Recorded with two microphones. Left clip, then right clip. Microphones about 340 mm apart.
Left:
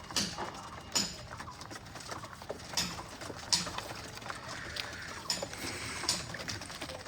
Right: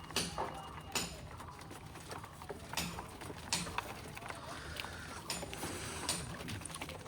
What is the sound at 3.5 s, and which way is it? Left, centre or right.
Clip-clop, right.